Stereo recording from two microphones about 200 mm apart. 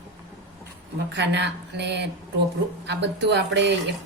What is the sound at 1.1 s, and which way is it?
A woman's voice, 60° right (ahead or behind).